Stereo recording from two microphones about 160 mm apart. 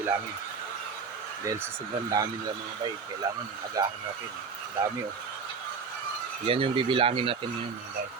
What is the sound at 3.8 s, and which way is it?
Speech, 20° right (ahead or behind).